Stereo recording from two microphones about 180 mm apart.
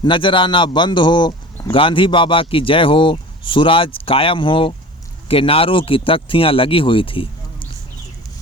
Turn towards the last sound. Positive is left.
turn(degrees=30)  # may be behind; listen again after turning